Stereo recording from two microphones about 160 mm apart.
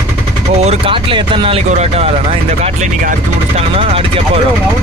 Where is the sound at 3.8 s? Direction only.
35° right (ahead or behind).